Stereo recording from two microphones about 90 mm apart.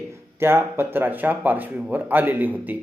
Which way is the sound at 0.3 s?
25° right (ahead or behind).